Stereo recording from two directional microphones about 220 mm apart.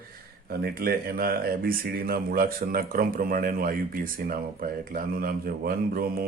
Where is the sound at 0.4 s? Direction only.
45° right (ahead or behind).